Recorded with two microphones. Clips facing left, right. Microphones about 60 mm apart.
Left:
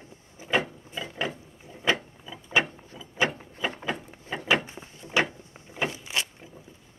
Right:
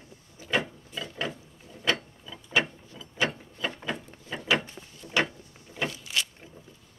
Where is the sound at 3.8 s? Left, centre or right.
Centre.